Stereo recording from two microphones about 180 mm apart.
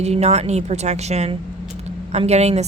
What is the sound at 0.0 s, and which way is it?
Speech, 35° right (ahead or behind).